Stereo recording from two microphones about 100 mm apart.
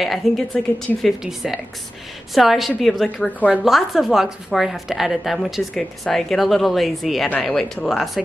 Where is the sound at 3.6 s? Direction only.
Centre (ahead or behind).